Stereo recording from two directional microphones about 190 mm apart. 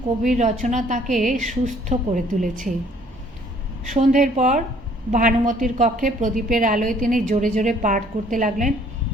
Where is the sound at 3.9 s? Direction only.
40° right (ahead or behind).